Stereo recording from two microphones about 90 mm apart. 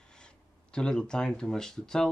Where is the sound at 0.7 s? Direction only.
10° left (ahead or behind).